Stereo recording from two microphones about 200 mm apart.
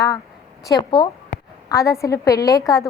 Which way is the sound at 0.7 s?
25° left (ahead or behind).